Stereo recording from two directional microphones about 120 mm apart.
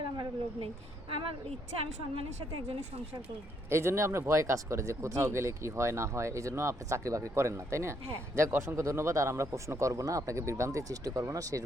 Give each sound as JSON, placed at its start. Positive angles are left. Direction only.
{"t": 0.0, "sound": "a sound", "side_deg": -40}
{"t": 1.1, "sound": "a woman's voice", "side_deg": -50}
{"t": 3.7, "sound": "speech", "side_deg": -25}